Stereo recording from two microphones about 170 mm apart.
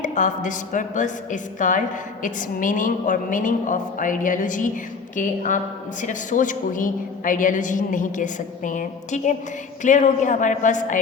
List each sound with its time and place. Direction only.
0.0 s a woman's voice: 45° left (ahead or behind)